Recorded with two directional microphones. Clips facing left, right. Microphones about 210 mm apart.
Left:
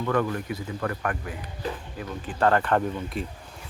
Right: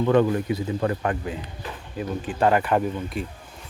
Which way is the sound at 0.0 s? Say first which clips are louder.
Right 6 dB; 25° right (ahead or behind).